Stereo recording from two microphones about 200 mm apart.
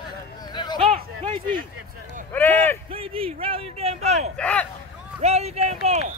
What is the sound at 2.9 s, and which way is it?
Speech, 30° right (ahead or behind).